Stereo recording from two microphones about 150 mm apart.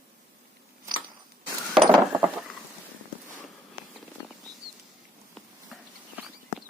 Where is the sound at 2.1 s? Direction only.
20° right (ahead or behind).